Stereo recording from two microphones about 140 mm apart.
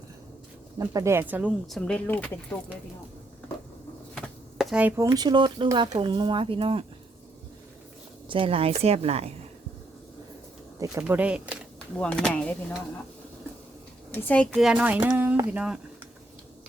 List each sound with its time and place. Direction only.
0.8 s speech: 20° right (ahead or behind)
1.5 s speech: centre (ahead or behind)
4.1 s chopping: centre (ahead or behind)
5.0 s speech: 30° right (ahead or behind)
8.3 s a woman's voice: 40° right (ahead or behind)
11.0 s speech: 10° right (ahead or behind)
11.9 s speech: 5° left (ahead or behind)
14.1 s speech: 10° left (ahead or behind)
14.6 s speech: 10° right (ahead or behind)